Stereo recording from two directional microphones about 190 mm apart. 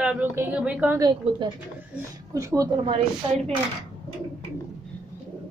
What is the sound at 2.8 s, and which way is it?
Speech, 30° right (ahead or behind).